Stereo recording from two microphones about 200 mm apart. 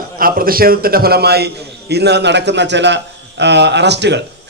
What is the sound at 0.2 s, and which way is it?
A man's voice, 45° right (ahead or behind).